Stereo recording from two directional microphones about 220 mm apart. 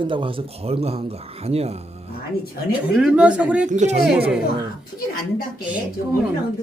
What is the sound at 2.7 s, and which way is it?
Speech, 5° right (ahead or behind).